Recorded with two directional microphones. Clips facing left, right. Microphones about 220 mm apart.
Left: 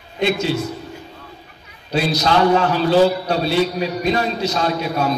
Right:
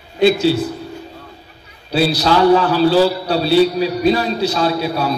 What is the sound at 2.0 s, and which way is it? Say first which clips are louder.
A man's voice: right 3 dB; 35° right (ahead or behind).